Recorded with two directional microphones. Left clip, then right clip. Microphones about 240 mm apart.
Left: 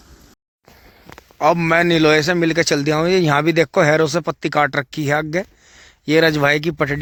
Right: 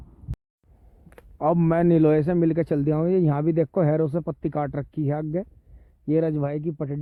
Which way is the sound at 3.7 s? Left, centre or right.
Left.